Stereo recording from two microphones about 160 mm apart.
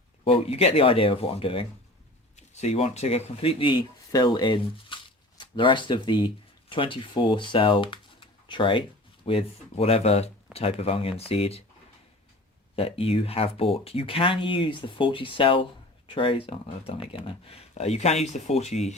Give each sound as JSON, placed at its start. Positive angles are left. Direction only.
{"t": 0.3, "sound": "speech", "side_deg": 40}
{"t": 12.7, "sound": "speech", "side_deg": 35}